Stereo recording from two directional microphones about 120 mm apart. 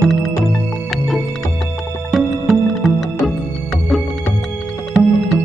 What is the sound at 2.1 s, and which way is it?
Music, centre (ahead or behind).